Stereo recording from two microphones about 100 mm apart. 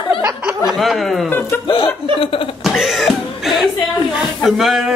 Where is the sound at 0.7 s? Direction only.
Centre (ahead or behind).